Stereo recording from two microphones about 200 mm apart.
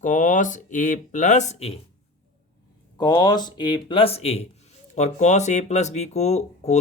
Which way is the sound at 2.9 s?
20° left (ahead or behind).